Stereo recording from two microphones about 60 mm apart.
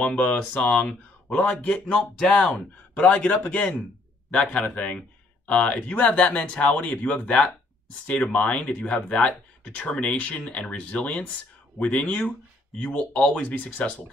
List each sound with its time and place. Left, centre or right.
0.0 s speech: centre
2.5 s speech: left